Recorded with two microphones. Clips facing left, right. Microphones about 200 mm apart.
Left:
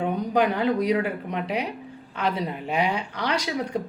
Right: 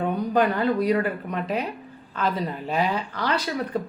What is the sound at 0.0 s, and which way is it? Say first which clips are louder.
Speech: right 1 dB; 10° left (ahead or behind).